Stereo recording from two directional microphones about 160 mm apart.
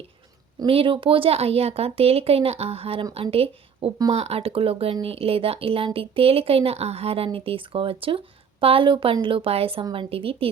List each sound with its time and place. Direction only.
0.6 s speech: 35° right (ahead or behind)